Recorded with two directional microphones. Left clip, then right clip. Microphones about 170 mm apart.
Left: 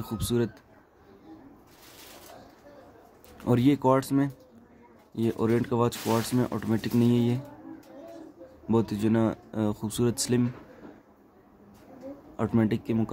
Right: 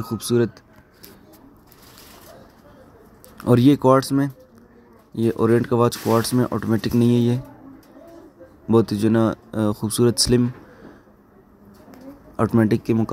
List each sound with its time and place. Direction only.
0.0 s speech: 15° right (ahead or behind)
3.3 s speech: 25° right (ahead or behind)
5.1 s speech: 20° right (ahead or behind)
8.6 s speech: 25° right (ahead or behind)
12.4 s speech: 30° right (ahead or behind)